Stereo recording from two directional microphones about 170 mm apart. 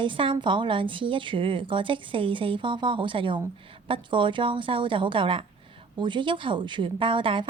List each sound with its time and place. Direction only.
0.0 s a woman's voice: 30° right (ahead or behind)